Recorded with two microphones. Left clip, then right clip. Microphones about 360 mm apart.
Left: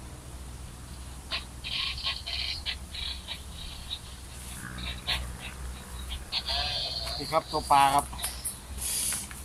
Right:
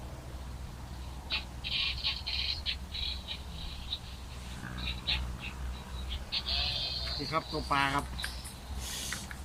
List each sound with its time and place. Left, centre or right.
1.6 s bird: centre
4.9 s bird: centre
6.1 s insect: centre
8.9 s a sound: centre